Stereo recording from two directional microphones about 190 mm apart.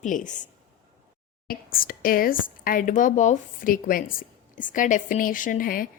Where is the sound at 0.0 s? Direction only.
40° left (ahead or behind).